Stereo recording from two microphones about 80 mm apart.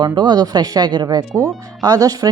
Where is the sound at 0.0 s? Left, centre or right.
Right.